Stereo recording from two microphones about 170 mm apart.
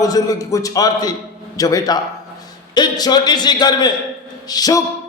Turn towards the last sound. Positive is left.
turn(degrees=20)  # may be behind; listen again after turning